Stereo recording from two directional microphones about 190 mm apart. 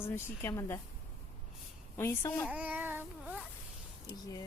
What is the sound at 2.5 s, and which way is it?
Speech, 5° right (ahead or behind).